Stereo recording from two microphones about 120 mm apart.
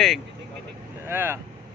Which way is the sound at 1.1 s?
20° right (ahead or behind).